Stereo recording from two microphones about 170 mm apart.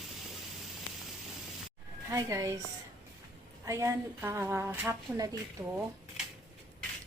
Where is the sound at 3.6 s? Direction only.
20° right (ahead or behind).